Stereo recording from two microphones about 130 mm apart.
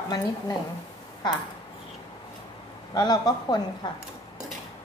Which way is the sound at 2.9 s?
30° left (ahead or behind).